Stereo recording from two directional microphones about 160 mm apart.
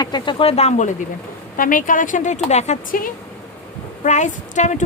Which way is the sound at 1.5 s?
60° left (ahead or behind).